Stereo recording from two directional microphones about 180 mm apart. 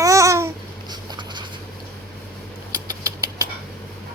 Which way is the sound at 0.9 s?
25° right (ahead or behind).